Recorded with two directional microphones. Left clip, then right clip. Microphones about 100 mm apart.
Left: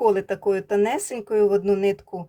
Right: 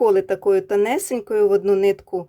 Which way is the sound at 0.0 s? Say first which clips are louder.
Right 4 dB; 55° right (ahead or behind).